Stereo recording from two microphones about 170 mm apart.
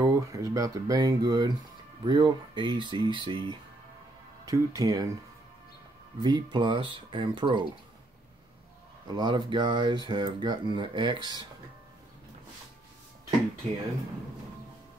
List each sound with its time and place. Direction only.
0.0 s speech: 20° right (ahead or behind)
6.2 s speech: 25° right (ahead or behind)
9.0 s speech: 25° right (ahead or behind)